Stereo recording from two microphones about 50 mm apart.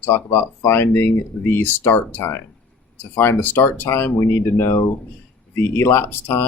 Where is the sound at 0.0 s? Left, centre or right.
Left.